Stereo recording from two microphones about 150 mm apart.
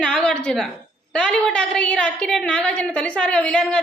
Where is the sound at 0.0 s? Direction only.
5° left (ahead or behind).